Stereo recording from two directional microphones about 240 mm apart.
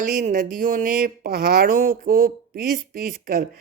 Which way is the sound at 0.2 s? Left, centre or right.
Right.